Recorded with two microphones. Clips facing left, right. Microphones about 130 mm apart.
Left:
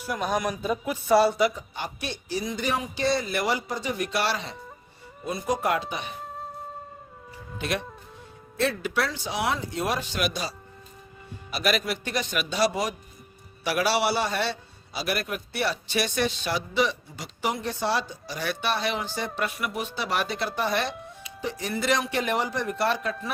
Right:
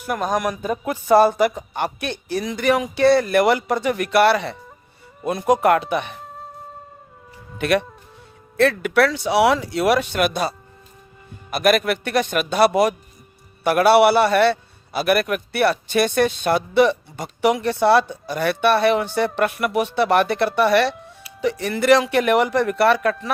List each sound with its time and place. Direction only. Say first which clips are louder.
0.0 s a man's voice: right 5 dB; 50° right (ahead or behind)
6.2 s music: even; centre (ahead or behind)
7.6 s speech: right 10 dB; 70° right (ahead or behind)
11.5 s a man's voice: right 8 dB; 55° right (ahead or behind)